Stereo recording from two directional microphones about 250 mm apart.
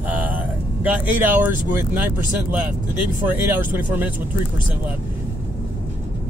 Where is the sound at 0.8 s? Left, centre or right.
Centre.